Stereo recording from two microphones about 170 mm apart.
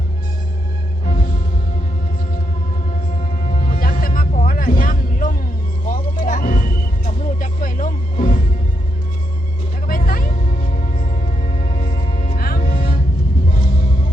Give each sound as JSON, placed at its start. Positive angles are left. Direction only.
{"t": 3.5, "sound": "music", "side_deg": 55}
{"t": 9.8, "sound": "music", "side_deg": 55}
{"t": 12.0, "sound": "music", "side_deg": 35}
{"t": 12.4, "sound": "music", "side_deg": 60}